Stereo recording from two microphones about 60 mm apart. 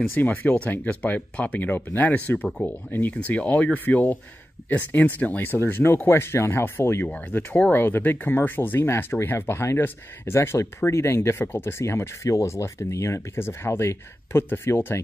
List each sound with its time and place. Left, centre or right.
0.1 s speech: left
7.1 s speech: left
11.8 s speech: left